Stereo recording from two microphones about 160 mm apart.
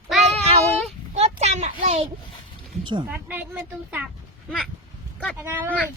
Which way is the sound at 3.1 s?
10° right (ahead or behind).